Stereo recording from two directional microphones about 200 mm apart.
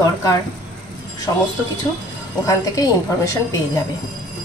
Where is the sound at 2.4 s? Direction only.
15° left (ahead or behind).